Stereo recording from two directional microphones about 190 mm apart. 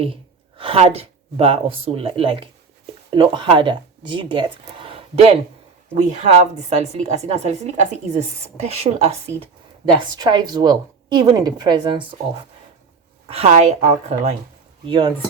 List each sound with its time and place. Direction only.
0.5 s a woman's voice: 30° right (ahead or behind)
10.2 s a woman's voice: 20° right (ahead or behind)